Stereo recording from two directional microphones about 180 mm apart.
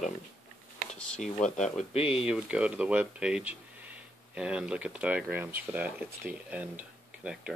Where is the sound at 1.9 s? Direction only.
30° left (ahead or behind).